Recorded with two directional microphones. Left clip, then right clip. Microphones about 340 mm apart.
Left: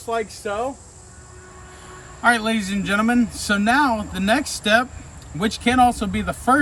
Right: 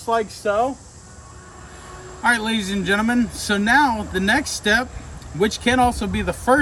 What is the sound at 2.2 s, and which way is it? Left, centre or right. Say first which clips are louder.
A man's voice: left 1 dB; centre.